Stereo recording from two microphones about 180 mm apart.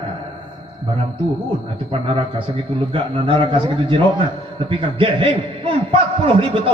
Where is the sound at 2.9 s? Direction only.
30° right (ahead or behind).